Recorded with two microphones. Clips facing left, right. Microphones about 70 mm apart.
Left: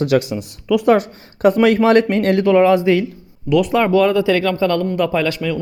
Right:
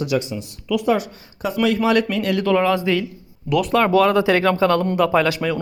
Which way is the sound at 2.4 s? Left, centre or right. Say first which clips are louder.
Left 6 dB; centre.